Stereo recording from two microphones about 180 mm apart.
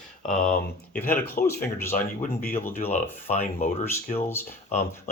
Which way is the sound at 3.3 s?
40° left (ahead or behind).